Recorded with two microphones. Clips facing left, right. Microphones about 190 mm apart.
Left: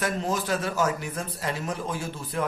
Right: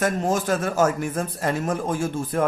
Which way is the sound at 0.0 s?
50° right (ahead or behind).